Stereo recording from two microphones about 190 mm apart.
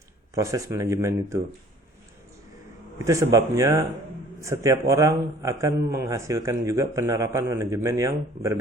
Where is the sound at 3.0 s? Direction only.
15° right (ahead or behind).